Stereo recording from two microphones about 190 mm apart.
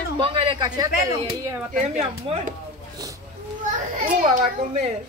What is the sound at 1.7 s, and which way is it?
Speech, 35° right (ahead or behind).